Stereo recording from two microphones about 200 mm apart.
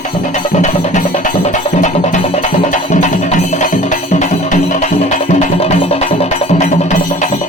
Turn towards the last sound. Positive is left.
turn(degrees=40)  # may be behind; listen again after turning